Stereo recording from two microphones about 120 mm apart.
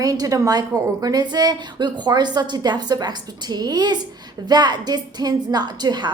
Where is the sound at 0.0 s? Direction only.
30° right (ahead or behind).